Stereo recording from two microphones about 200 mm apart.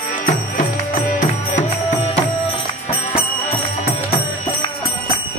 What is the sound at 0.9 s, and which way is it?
Music, 40° left (ahead or behind).